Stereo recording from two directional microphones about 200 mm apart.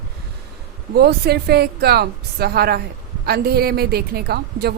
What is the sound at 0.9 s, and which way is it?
A woman's voice, 55° right (ahead or behind).